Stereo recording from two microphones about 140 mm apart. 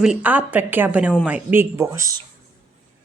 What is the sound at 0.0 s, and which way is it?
Speech, 10° right (ahead or behind).